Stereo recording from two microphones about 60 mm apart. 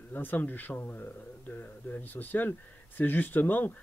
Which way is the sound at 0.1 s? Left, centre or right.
Left.